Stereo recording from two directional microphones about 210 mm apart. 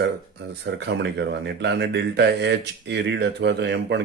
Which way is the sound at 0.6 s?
55° right (ahead or behind).